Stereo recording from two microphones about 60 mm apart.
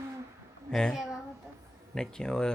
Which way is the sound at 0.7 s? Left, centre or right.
Centre.